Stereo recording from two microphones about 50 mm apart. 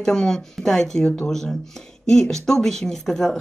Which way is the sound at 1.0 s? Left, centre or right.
Left.